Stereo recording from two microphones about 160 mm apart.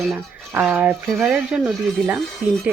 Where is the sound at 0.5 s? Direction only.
10° right (ahead or behind).